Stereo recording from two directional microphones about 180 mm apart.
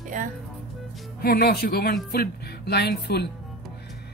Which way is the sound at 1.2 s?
60° left (ahead or behind).